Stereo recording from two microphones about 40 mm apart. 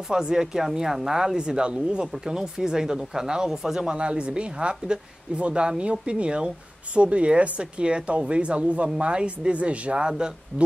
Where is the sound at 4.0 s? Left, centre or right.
Right.